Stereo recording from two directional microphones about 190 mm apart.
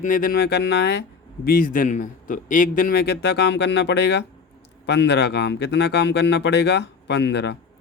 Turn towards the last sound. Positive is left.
turn(degrees=65)  # may be behind; listen again after turning